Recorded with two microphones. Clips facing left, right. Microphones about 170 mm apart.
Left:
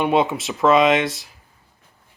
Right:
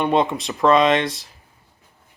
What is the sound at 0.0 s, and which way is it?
Speech, 5° left (ahead or behind).